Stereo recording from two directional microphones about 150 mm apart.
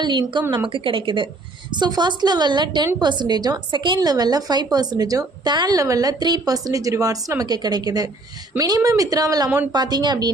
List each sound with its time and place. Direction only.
0.0 s a woman's voice: 30° right (ahead or behind)